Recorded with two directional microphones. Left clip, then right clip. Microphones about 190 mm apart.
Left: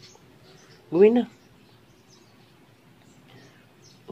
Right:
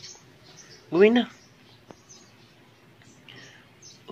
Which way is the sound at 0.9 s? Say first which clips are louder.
Left 1 dB; 5° left (ahead or behind).